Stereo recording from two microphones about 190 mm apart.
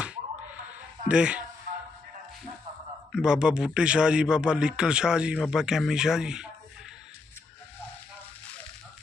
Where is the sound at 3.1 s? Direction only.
5° right (ahead or behind).